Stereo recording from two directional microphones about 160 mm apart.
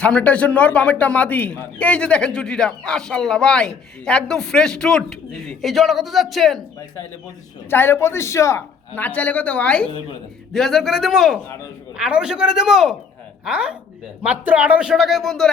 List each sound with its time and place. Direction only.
0.0 s a man's voice: 5° left (ahead or behind)
6.7 s a woman's voice: 20° left (ahead or behind); by 15.4 s centre (ahead or behind)